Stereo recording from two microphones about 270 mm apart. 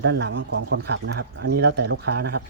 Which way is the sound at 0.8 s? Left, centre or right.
Right.